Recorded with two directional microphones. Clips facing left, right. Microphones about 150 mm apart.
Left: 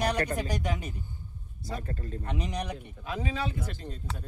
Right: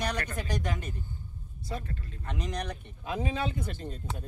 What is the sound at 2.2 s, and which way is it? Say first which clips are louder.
Speech: left 1 dB; 10° left (ahead or behind).